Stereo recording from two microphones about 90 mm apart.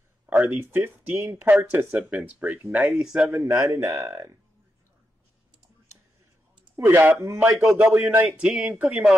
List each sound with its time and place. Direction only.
0.3 s speech: 25° right (ahead or behind)
2.8 s speech: 5° right (ahead or behind)
3.3 s a man's voice: 30° right (ahead or behind)
6.8 s speech: 25° right (ahead or behind)
8.4 s speech: 10° right (ahead or behind)
8.7 s speech: 20° right (ahead or behind)